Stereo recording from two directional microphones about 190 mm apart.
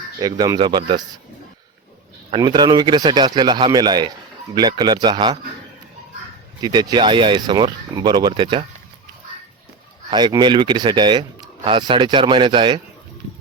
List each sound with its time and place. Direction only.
0.2 s speech: 20° right (ahead or behind)
2.3 s speech: 25° right (ahead or behind)
6.6 s speech: 20° right (ahead or behind)
10.1 s speech: 25° right (ahead or behind)